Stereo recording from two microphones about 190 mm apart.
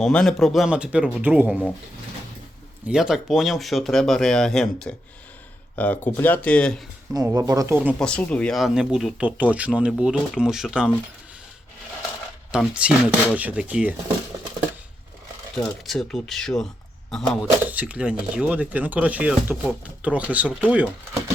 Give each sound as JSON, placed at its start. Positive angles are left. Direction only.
{"t": 0.0, "sound": "speech", "side_deg": 5}
{"t": 2.8, "sound": "speech", "side_deg": -5}
{"t": 7.1, "sound": "speech", "side_deg": -20}
{"t": 7.9, "sound": "speech", "side_deg": 5}
{"t": 12.5, "sound": "speech", "side_deg": -5}
{"t": 15.5, "sound": "speech", "side_deg": 0}